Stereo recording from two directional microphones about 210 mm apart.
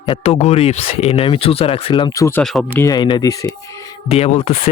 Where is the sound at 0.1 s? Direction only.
30° left (ahead or behind); by 2.4 s 15° left (ahead or behind).